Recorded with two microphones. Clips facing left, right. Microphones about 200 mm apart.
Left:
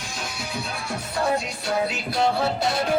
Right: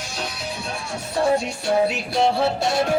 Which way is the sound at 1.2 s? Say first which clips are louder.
Right 5 dB; 30° right (ahead or behind).